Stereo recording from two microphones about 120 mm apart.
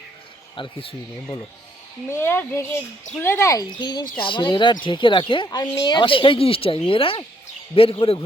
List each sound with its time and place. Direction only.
0.5 s speech: 45° left (ahead or behind)
2.0 s speech: 20° left (ahead or behind)
3.8 s speech: 40° left (ahead or behind)